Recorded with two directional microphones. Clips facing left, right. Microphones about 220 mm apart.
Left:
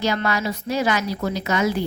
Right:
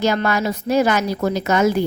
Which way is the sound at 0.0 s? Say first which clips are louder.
Right 4 dB; 50° right (ahead or behind).